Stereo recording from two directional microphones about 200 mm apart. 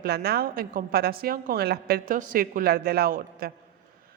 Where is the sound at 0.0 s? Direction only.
50° right (ahead or behind).